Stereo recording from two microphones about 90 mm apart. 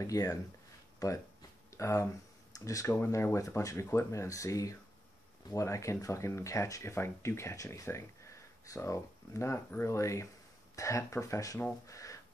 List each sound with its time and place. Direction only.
0.0 s speech: 35° left (ahead or behind)
11.9 s music: 40° left (ahead or behind)